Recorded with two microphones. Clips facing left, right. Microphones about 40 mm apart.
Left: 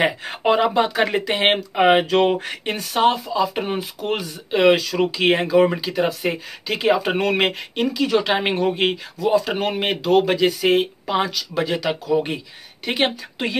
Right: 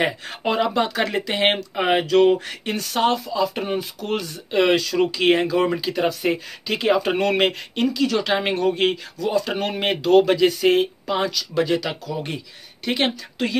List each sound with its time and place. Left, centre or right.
0.0 s speech: left
2.8 s speech: centre
12.1 s speech: left